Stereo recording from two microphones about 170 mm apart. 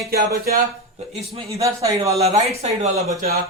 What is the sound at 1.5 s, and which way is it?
Speech, 20° right (ahead or behind).